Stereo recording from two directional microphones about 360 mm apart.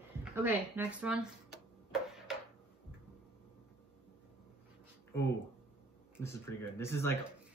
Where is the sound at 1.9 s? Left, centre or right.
Centre.